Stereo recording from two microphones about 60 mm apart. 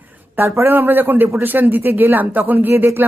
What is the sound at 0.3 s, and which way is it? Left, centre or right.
A man's voice, right.